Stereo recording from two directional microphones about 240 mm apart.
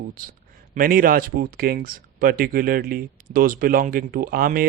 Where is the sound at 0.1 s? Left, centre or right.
Right.